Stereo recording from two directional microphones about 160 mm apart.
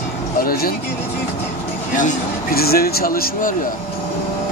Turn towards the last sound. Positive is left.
turn(degrees=65)  # may be behind; listen again after turning